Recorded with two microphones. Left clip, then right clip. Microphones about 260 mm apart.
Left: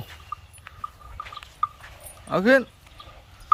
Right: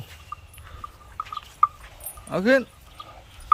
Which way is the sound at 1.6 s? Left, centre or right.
Centre.